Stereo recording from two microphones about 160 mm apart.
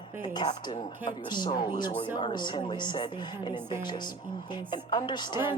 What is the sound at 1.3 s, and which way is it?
Speech, 25° left (ahead or behind).